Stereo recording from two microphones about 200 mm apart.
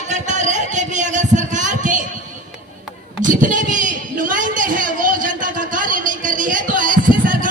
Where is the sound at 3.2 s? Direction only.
40° right (ahead or behind).